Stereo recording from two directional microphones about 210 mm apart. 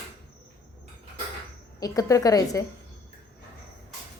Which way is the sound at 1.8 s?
15° left (ahead or behind).